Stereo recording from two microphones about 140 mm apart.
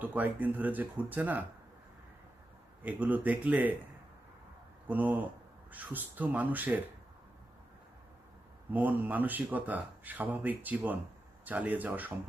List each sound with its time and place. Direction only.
0.0 s speech: 10° right (ahead or behind)
2.8 s speech: 10° right (ahead or behind)
4.9 s speech: 10° right (ahead or behind)
8.7 s speech: 10° right (ahead or behind)